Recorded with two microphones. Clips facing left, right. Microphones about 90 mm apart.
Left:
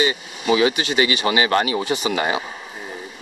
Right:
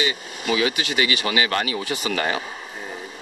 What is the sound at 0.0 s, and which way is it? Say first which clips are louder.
Speech: left 4 dB; 30° left (ahead or behind).